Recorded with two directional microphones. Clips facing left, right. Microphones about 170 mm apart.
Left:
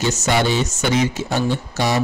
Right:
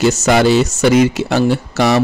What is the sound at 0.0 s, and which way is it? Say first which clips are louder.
Speech: right 7 dB; 90° right.